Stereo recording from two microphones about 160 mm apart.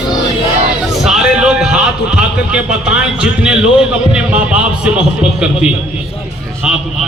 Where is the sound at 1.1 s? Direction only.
5° right (ahead or behind).